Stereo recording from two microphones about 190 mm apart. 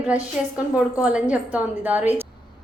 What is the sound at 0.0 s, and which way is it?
A woman's voice, 5° right (ahead or behind).